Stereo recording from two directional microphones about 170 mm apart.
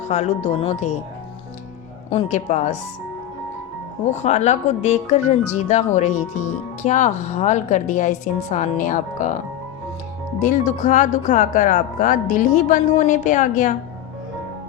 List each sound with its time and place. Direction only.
0.1 s speech: 40° left (ahead or behind)
2.0 s speech: 40° left (ahead or behind)
4.0 s speech: 40° left (ahead or behind)
10.4 s speech: 50° left (ahead or behind)